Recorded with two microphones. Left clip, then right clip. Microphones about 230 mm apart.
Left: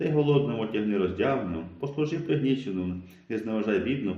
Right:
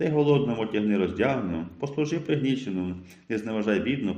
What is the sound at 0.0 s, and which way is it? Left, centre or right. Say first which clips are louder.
A man's voice: right 2 dB; right.